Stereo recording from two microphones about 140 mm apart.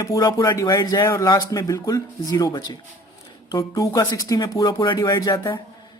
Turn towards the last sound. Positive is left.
turn(degrees=30)  # may be behind; listen again after turning